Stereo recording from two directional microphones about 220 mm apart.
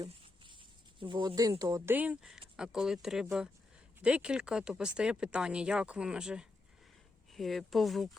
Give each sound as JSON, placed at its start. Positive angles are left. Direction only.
{"t": 0.9, "sound": "speech", "side_deg": -20}